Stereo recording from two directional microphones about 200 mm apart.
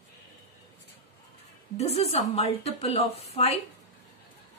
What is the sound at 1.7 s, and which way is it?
A woman's voice, 30° left (ahead or behind).